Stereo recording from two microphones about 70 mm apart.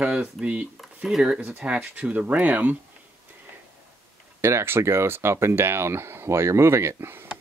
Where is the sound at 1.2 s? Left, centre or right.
Centre.